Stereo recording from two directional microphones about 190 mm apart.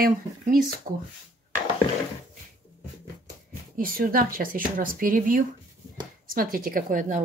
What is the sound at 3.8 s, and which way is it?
Speech, 50° right (ahead or behind).